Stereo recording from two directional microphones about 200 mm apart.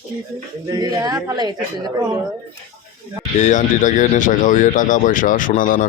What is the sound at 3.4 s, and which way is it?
A man's voice, 40° left (ahead or behind).